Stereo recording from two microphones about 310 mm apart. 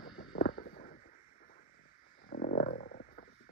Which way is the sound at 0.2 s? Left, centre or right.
Left.